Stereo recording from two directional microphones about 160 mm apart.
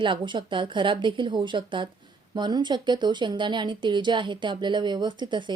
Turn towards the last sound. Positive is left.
turn(degrees=-30)  # may be behind; listen again after turning